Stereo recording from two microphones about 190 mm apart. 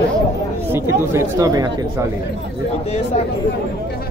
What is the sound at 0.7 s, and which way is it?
Speech, 15° right (ahead or behind).